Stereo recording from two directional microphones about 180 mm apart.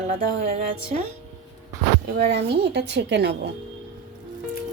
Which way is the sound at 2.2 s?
70° right (ahead or behind).